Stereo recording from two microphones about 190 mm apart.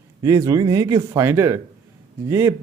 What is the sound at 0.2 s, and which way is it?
A man's voice, 20° right (ahead or behind).